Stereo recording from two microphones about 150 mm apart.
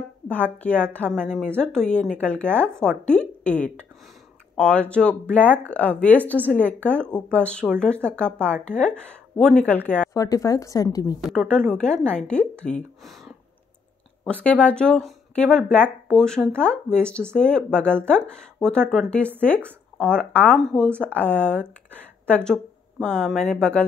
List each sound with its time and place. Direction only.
0.3 s speech: 10° left (ahead or behind)
10.1 s a woman's voice: 20° left (ahead or behind)
11.2 s a woman's voice: 5° left (ahead or behind)